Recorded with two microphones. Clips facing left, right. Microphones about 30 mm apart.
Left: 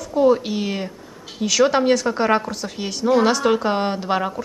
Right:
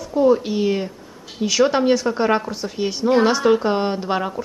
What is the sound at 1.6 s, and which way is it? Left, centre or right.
A woman's voice, centre.